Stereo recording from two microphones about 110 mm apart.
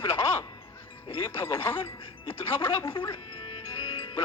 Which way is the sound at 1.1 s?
55° left (ahead or behind).